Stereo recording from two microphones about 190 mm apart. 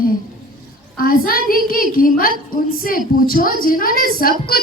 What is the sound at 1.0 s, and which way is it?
Speech, 50° left (ahead or behind).